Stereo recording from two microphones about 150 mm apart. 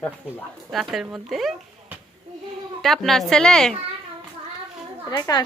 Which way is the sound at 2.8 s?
Centre (ahead or behind).